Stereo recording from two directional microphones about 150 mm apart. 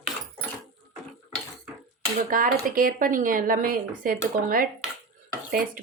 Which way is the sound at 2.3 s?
70° right (ahead or behind).